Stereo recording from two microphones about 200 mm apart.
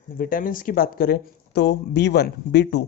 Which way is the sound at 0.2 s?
45° left (ahead or behind).